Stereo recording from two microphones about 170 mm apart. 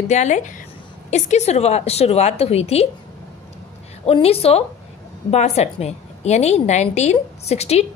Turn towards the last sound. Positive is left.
turn(degrees=40)  # may be behind; listen again after turning